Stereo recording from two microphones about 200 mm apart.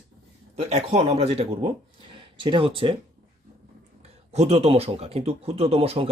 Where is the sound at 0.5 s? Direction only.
35° right (ahead or behind).